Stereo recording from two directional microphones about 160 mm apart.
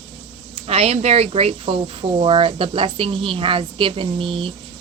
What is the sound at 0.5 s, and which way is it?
Speech, 40° right (ahead or behind).